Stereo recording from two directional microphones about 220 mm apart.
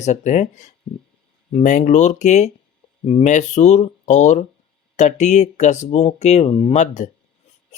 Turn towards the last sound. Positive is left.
turn(degrees=35)  # may be behind; listen again after turning